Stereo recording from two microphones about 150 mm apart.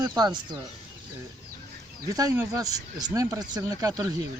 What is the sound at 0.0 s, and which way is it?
Speech, 25° right (ahead or behind).